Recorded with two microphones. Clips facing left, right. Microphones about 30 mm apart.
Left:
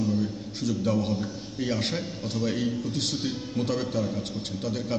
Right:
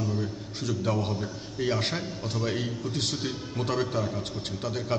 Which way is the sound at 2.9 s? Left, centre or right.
Right.